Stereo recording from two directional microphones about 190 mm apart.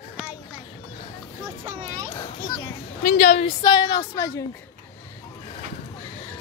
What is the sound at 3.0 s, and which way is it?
Speech, 40° left (ahead or behind).